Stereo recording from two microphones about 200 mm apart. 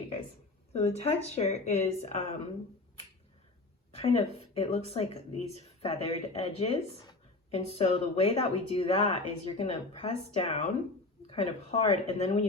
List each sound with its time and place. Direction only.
0.7 s speech: 30° left (ahead or behind)
3.9 s speech: 30° left (ahead or behind)